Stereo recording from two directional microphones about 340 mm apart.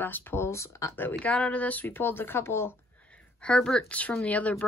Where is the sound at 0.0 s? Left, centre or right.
Centre.